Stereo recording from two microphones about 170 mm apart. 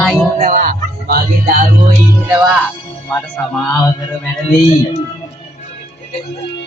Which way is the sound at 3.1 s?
10° left (ahead or behind).